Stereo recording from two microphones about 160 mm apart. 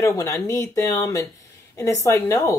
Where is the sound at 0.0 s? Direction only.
20° left (ahead or behind).